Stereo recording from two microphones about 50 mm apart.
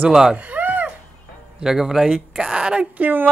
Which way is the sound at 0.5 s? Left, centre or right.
Right.